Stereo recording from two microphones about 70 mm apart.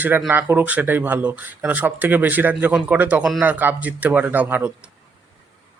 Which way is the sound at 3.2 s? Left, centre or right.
Centre.